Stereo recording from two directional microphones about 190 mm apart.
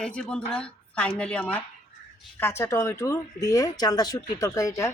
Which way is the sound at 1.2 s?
5° left (ahead or behind).